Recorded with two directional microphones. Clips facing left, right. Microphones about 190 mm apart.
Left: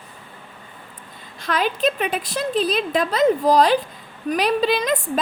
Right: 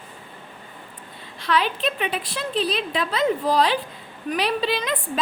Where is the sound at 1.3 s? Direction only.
45° left (ahead or behind).